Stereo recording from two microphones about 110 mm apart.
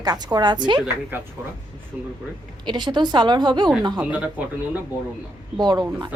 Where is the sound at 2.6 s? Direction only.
45° right (ahead or behind).